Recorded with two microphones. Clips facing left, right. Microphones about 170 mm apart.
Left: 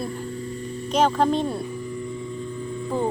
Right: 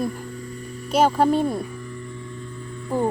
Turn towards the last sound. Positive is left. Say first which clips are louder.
# right 2 dB
turn(degrees=-10)  # may be behind; listen again after turning